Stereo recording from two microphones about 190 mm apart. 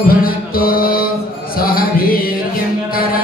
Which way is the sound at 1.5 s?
50° left (ahead or behind).